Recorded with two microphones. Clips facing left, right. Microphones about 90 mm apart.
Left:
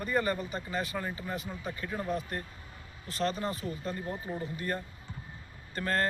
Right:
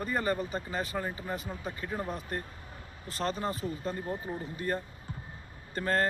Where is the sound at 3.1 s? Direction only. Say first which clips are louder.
Left 1 dB; 35° right (ahead or behind).